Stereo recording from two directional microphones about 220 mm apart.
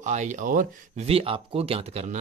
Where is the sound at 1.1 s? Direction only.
25° right (ahead or behind).